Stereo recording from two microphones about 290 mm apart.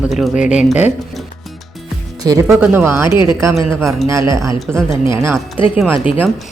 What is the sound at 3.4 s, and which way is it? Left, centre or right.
Speech, centre.